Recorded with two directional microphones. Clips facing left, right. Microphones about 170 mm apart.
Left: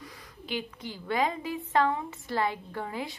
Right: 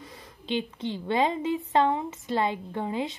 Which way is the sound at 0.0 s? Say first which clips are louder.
Right 1 dB; 25° right (ahead or behind).